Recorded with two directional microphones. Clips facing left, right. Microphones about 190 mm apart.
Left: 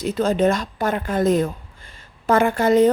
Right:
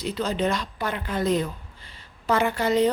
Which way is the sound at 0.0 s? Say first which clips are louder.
Left 7 dB; 50° left (ahead or behind).